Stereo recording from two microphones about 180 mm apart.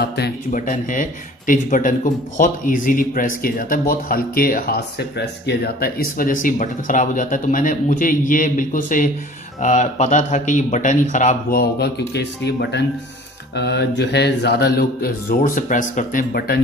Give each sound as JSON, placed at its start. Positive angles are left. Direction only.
{"t": 0.5, "sound": "speech", "side_deg": 45}
{"t": 12.1, "sound": "speech", "side_deg": 70}